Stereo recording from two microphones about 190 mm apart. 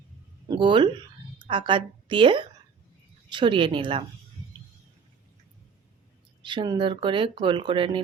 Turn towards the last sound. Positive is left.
turn(degrees=-25)  # may be behind; listen again after turning